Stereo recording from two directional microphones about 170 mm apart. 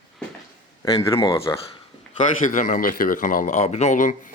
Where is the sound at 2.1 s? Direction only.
50° left (ahead or behind).